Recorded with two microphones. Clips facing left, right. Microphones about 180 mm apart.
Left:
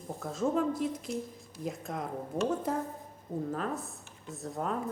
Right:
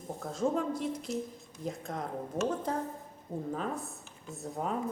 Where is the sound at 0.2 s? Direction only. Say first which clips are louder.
Left 1 dB; centre (ahead or behind).